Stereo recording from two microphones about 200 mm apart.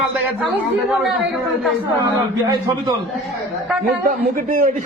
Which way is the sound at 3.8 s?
45° right (ahead or behind).